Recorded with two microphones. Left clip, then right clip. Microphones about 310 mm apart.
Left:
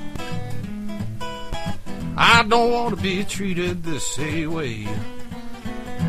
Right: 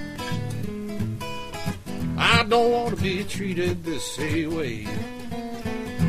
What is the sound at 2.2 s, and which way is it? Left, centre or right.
Music, left.